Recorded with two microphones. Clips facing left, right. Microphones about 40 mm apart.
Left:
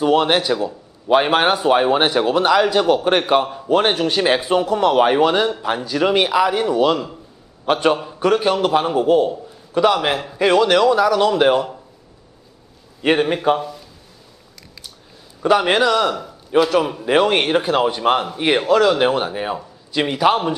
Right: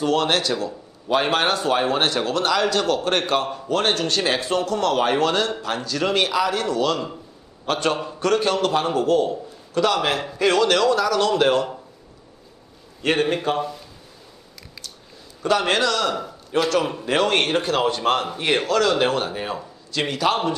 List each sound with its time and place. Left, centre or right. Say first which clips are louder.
0.0 s speech: left 4 dB; centre
13.0 s speech: left 4 dB; centre
13.6 s speech: right 2 dB; centre
15.4 s speech: left 5 dB; centre
16.1 s a man's voice: left 3 dB; centre